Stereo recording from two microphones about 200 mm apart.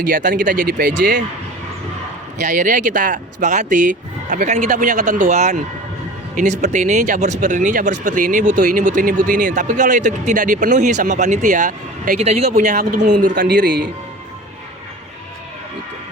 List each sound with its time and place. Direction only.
0.1 s speech: 40° right (ahead or behind)
2.4 s speech: 40° right (ahead or behind)
13.3 s speech: 55° right (ahead or behind)